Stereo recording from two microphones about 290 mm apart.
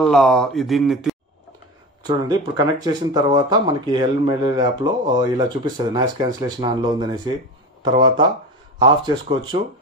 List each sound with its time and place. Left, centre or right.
0.0 s speech: centre
2.0 s speech: centre
8.8 s speech: centre